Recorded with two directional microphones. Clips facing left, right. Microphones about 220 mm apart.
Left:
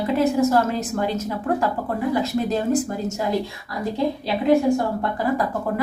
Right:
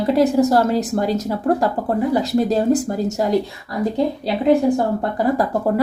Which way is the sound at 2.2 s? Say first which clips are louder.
Right 4 dB; 35° right (ahead or behind).